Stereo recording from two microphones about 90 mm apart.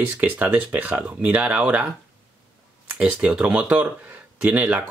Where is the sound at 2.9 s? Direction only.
15° right (ahead or behind).